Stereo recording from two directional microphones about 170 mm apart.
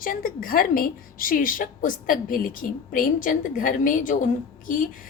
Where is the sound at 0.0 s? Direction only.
55° left (ahead or behind).